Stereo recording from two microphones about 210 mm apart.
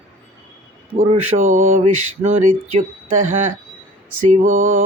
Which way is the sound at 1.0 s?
35° right (ahead or behind).